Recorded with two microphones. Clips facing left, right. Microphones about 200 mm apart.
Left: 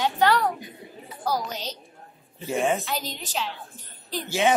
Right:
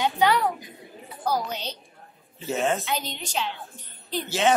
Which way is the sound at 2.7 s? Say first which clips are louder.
Even; centre (ahead or behind).